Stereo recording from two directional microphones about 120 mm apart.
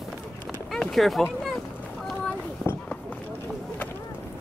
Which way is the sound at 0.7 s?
Centre (ahead or behind).